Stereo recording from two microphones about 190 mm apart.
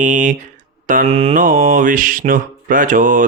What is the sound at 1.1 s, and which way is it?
Mantra, 30° right (ahead or behind).